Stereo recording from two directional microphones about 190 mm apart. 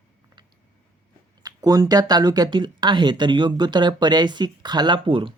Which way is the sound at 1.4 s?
20° right (ahead or behind).